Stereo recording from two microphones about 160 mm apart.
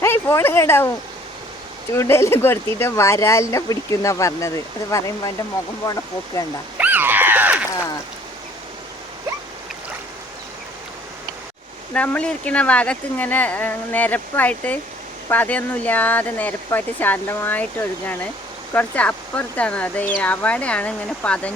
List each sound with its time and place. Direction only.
0.0 s speech: 15° left (ahead or behind)
2.0 s speech: 15° left (ahead or behind)
6.7 s a sound: 10° right (ahead or behind)
11.9 s speech: 10° left (ahead or behind)